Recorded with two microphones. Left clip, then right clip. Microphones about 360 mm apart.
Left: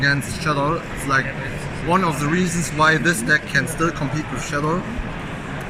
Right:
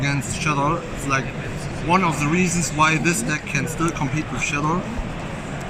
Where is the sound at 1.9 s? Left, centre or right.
Centre.